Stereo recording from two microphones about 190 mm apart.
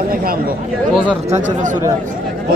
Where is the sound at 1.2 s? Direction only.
40° right (ahead or behind).